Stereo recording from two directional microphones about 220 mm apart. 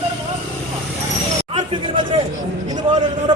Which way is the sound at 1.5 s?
20° right (ahead or behind).